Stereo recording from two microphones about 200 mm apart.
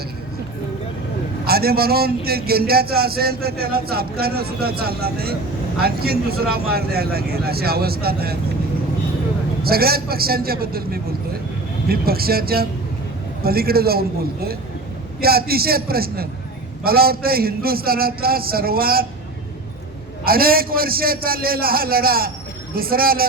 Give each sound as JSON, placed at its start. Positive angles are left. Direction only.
{"t": 1.5, "sound": "a man's voice", "side_deg": -50}
{"t": 9.6, "sound": "a man's voice", "side_deg": -50}
{"t": 15.2, "sound": "a man's voice", "side_deg": -50}
{"t": 20.2, "sound": "a man's voice", "side_deg": -45}